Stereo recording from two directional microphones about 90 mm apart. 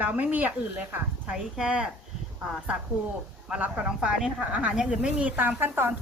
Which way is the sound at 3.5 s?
10° right (ahead or behind).